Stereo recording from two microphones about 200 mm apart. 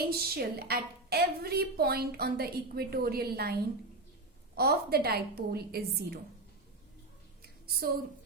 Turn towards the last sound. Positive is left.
turn(degrees=-50)  # may be behind; listen again after turning